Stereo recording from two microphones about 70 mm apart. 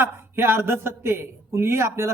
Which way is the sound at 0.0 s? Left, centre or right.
Right.